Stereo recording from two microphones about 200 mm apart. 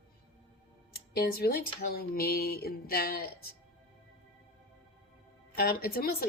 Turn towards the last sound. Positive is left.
turn(degrees=50)  # may be behind; listen again after turning